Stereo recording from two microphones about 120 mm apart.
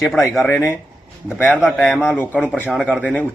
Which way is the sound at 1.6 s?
Centre (ahead or behind).